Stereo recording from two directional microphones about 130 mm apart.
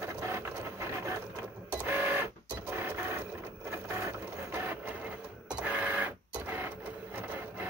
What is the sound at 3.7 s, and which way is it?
Printer, 20° right (ahead or behind).